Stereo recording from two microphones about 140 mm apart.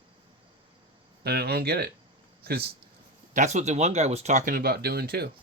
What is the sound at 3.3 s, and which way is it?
Speech, 60° right (ahead or behind).